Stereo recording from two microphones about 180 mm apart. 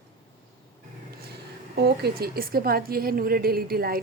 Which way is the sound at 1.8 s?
60° right (ahead or behind).